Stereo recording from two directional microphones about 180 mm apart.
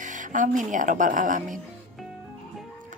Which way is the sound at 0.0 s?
45° right (ahead or behind).